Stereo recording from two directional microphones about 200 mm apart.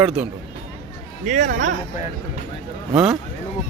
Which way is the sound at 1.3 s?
40° right (ahead or behind).